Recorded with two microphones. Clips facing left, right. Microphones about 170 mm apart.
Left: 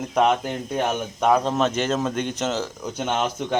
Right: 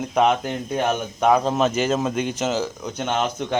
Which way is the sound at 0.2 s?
Centre (ahead or behind).